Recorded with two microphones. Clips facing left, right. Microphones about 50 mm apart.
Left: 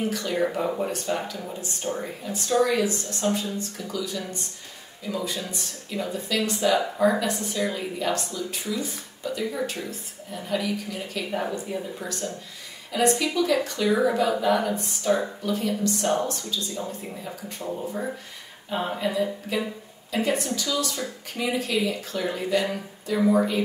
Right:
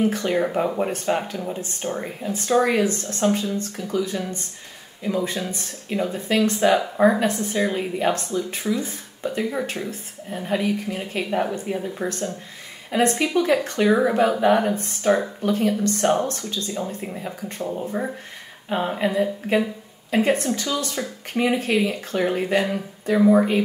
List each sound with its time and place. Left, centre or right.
0.0 s a woman's voice: right
15.0 s speech: right
17.8 s speech: right
18.9 s a woman's voice: right